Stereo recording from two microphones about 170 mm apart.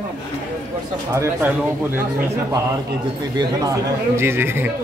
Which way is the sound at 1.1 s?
15° right (ahead or behind).